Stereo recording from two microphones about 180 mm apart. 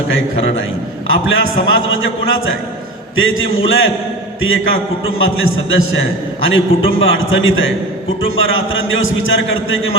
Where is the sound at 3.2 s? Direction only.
90° left.